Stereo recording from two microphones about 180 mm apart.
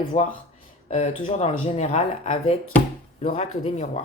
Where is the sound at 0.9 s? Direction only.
40° left (ahead or behind).